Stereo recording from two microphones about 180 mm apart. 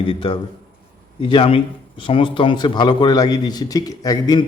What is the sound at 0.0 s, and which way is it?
A man's voice, 30° left (ahead or behind).